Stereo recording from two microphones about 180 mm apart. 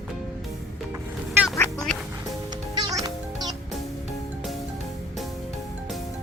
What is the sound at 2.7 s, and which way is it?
Music, 20° right (ahead or behind).